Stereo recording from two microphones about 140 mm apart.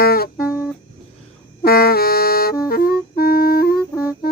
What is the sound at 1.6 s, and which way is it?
Music, 90° left.